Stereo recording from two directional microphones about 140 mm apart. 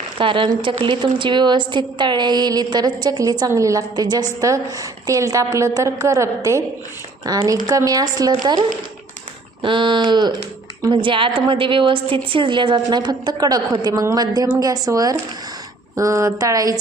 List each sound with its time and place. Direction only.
0.2 s a woman's voice: 40° right (ahead or behind)